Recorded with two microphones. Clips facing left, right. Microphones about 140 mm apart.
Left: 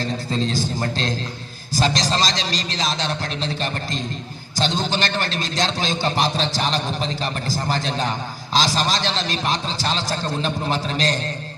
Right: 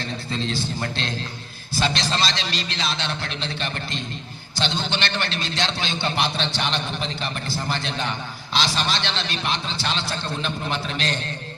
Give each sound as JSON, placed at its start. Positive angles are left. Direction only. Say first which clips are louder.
{"t": 0.0, "sound": "a man's voice", "louder": "left 5 dB", "side_deg": 40}